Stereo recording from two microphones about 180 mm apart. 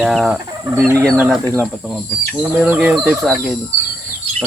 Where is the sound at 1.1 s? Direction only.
5° right (ahead or behind).